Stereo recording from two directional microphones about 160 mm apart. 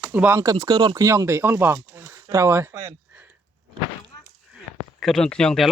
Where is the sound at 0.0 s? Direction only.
10° right (ahead or behind).